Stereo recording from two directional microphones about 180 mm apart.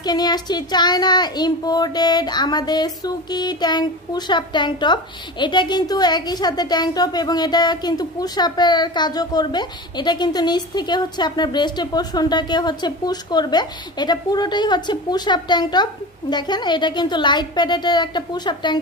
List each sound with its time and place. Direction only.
0.0 s speech: 20° left (ahead or behind)